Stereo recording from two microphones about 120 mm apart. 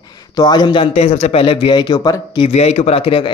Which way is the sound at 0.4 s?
35° left (ahead or behind).